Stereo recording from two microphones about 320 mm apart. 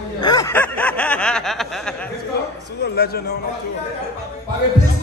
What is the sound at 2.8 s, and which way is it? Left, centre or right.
Speech, left.